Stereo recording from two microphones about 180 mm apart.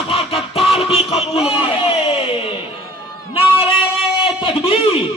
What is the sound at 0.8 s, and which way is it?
Music, 30° left (ahead or behind).